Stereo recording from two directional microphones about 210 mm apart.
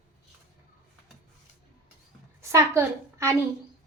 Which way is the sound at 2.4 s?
15° right (ahead or behind).